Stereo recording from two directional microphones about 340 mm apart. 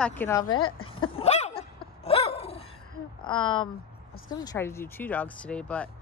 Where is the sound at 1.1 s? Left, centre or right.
Centre.